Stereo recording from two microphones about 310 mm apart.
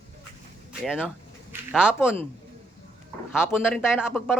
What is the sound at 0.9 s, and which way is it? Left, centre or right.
Speech, centre.